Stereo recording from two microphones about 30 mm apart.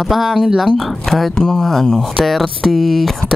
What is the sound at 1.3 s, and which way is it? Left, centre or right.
Speech, centre.